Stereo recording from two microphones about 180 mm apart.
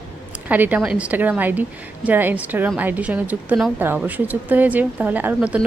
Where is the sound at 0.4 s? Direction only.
10° right (ahead or behind).